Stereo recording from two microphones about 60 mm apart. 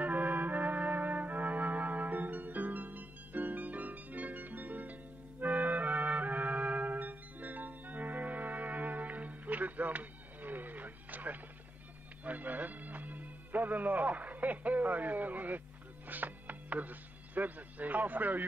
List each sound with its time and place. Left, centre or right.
0.0 s music: right
12.3 s a man's voice: right
16.1 s music: right